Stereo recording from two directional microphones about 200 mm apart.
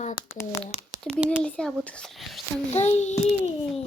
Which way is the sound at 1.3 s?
5° left (ahead or behind).